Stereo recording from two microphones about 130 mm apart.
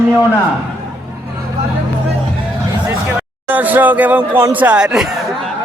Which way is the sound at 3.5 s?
15° right (ahead or behind).